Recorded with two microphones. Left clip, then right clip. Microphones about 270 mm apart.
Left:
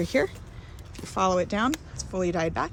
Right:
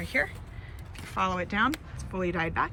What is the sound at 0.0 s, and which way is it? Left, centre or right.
A woman's voice, centre.